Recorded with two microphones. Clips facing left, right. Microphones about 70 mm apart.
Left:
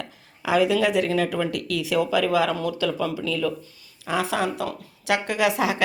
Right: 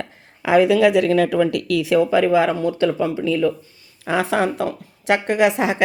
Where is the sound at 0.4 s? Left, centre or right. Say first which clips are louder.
Right 6 dB; right.